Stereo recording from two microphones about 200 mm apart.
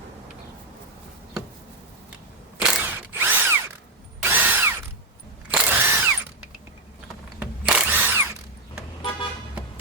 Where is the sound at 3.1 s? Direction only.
10° right (ahead or behind).